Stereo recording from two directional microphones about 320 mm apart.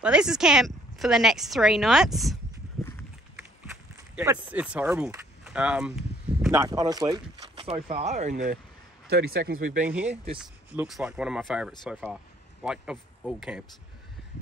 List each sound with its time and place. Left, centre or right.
0.0 s a woman's voice: centre
2.8 s a sound: centre
4.1 s speech: centre
10.4 s a woman's voice: centre